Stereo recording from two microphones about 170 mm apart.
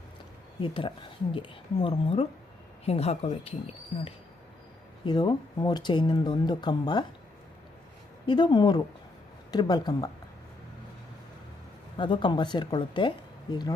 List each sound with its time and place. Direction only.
0.6 s speech: 30° left (ahead or behind)
5.0 s speech: 25° left (ahead or behind)
8.3 s speech: 25° left (ahead or behind)
11.9 s speech: 25° left (ahead or behind)